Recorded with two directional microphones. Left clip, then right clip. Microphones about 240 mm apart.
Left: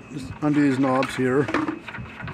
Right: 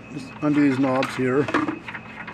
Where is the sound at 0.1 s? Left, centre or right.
Centre.